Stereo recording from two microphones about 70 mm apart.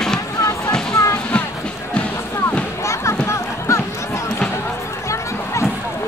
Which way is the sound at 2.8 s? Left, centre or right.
Left.